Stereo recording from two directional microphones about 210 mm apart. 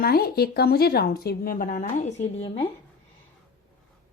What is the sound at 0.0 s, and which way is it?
A woman's voice, 45° left (ahead or behind).